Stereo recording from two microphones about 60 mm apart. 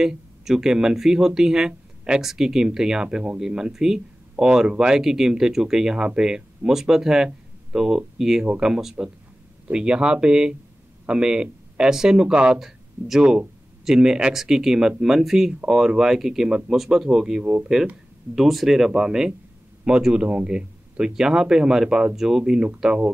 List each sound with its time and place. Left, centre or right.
0.0 s speech: centre
13.2 s speech: centre